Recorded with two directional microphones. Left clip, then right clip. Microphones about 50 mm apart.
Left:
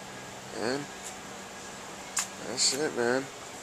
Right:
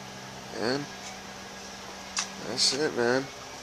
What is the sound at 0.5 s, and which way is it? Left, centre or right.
Speech, centre.